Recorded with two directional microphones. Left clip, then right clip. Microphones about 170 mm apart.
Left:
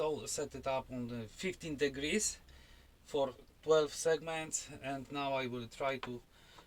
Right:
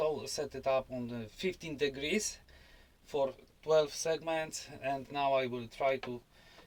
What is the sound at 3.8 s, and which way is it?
Speech, 20° right (ahead or behind).